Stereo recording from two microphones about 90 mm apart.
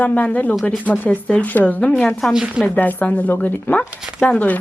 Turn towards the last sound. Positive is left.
turn(degrees=15)  # may be behind; listen again after turning